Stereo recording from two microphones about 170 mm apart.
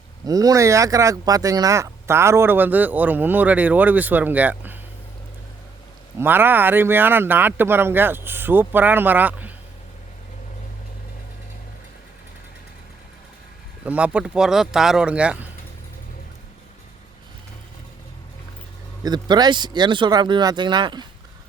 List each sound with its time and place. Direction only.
0.3 s speech: 20° right (ahead or behind)
6.1 s speech: 10° right (ahead or behind)
13.8 s speech: 10° right (ahead or behind)
19.0 s speech: 25° right (ahead or behind)